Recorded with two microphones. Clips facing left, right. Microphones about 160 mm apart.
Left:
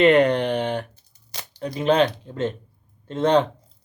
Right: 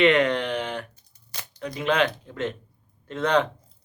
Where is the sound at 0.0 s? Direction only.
35° left (ahead or behind).